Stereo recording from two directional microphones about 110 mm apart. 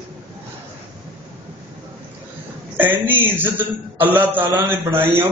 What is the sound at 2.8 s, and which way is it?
Speech, 15° right (ahead or behind).